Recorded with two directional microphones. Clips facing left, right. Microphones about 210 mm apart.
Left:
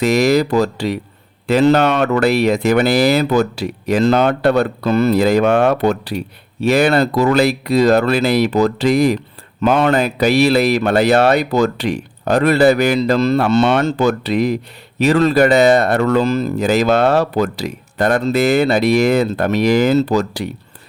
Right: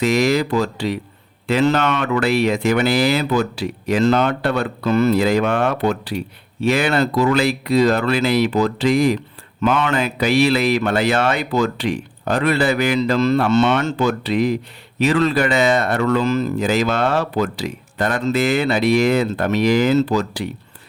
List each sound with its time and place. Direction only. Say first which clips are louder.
0.0 s speech: left 3 dB; 40° left (ahead or behind)